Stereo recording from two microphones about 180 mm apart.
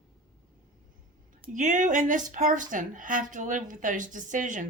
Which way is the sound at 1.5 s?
45° right (ahead or behind).